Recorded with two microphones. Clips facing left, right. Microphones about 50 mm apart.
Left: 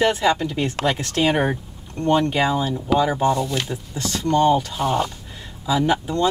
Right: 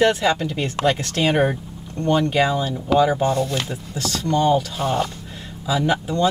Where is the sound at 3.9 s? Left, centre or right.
Left.